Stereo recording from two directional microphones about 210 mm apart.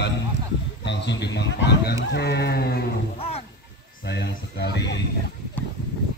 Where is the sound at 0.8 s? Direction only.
55° left (ahead or behind).